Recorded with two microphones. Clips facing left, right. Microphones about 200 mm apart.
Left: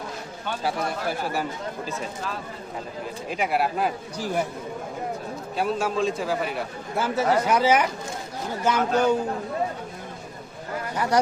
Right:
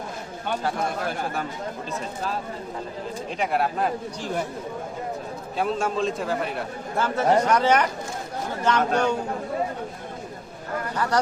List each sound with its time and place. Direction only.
3.2 s a man's voice: 5° left (ahead or behind)
5.5 s a man's voice: centre (ahead or behind)
10.9 s speech: 10° left (ahead or behind)